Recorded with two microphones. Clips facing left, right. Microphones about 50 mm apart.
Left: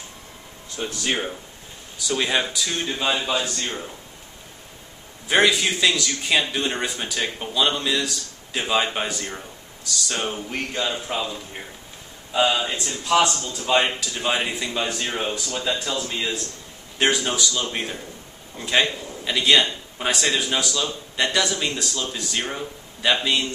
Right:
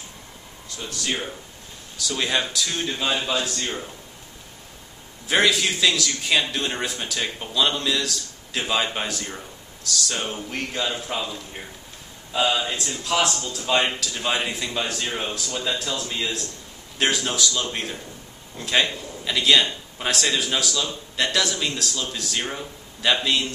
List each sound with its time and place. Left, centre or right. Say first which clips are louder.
0.7 s speech: left 3 dB; left
2.0 s a man's voice: left 2 dB; centre
5.3 s a man's voice: left 1 dB; centre